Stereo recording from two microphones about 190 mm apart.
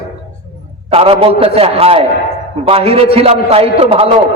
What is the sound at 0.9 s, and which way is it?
A man's voice, 30° right (ahead or behind).